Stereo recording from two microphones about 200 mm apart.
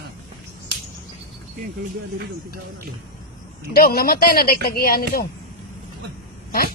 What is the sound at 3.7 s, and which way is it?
Speech, 50° left (ahead or behind).